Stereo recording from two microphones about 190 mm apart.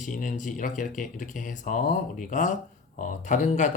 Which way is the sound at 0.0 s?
40° left (ahead or behind).